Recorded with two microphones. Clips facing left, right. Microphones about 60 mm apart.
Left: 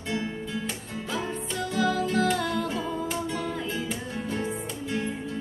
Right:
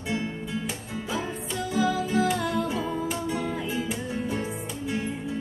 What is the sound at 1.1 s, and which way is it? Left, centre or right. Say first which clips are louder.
Music: even; centre.